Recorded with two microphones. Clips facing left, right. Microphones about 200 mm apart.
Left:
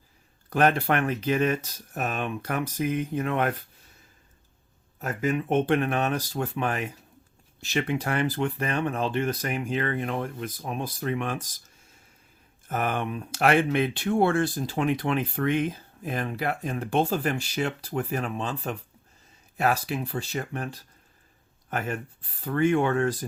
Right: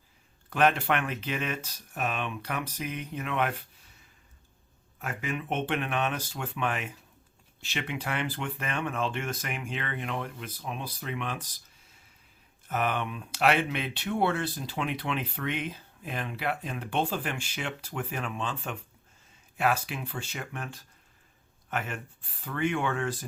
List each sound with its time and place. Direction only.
0.5 s speech: 40° left (ahead or behind)
4.9 s speech: 40° left (ahead or behind)
12.6 s speech: 45° left (ahead or behind)